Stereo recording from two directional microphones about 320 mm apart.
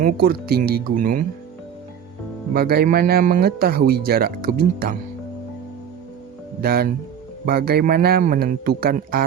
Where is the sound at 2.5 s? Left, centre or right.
Right.